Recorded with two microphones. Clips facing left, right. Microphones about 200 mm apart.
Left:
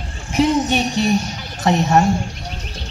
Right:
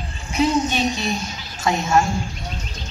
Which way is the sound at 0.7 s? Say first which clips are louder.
Left 5 dB; 65° left (ahead or behind).